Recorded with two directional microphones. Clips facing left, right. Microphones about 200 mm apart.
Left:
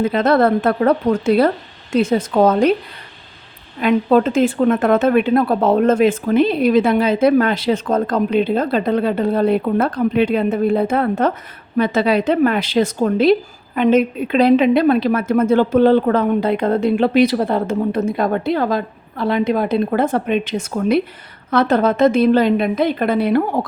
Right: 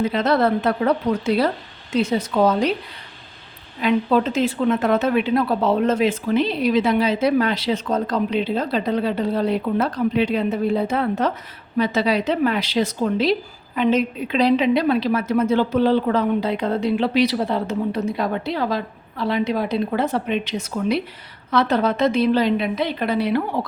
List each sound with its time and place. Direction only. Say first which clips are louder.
0.0 s speech: left 4 dB; 50° left (ahead or behind)
3.8 s speech: left 4 dB; 50° left (ahead or behind)